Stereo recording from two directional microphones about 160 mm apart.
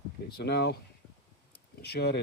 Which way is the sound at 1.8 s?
90° left.